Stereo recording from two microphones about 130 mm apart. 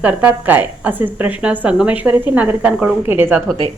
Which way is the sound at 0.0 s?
10° right (ahead or behind).